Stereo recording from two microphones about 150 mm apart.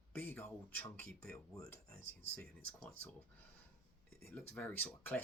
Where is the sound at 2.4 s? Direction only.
10° left (ahead or behind).